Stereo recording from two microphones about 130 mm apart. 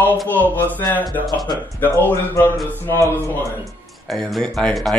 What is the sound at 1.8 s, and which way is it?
Speech, 20° left (ahead or behind).